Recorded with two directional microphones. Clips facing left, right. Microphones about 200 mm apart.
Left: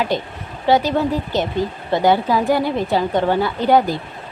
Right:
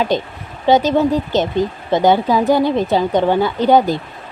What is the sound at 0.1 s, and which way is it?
Speech, 20° right (ahead or behind).